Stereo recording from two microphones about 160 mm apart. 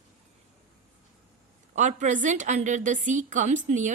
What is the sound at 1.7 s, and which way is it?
A woman's voice, 50° right (ahead or behind).